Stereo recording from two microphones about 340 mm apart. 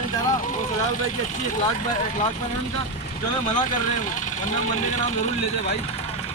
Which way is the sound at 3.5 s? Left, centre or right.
Left.